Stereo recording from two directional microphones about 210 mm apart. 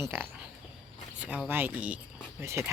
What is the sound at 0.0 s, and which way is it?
Speech, 10° right (ahead or behind).